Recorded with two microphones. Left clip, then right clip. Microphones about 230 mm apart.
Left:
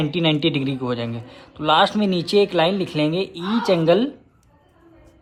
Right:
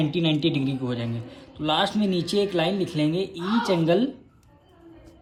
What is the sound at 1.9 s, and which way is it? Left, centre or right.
Speech, centre.